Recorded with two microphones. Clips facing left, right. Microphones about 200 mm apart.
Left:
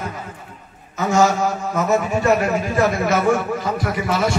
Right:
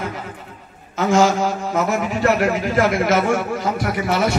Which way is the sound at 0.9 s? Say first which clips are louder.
Right 1 dB; 90° right.